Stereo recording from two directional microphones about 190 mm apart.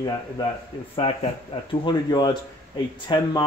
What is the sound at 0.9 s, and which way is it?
A man's voice, 30° left (ahead or behind).